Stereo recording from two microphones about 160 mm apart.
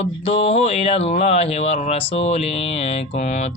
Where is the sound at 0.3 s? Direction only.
40° left (ahead or behind).